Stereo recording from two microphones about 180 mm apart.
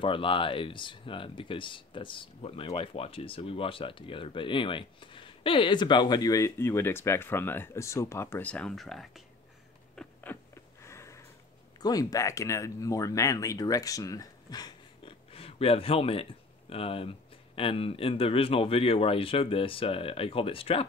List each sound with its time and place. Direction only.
0.0 s speech: 30° left (ahead or behind); by 9.2 s centre (ahead or behind)
9.9 s a sound: 15° left (ahead or behind)
11.8 s speech: 20° left (ahead or behind)